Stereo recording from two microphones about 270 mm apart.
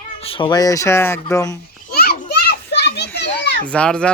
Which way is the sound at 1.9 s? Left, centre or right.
Left.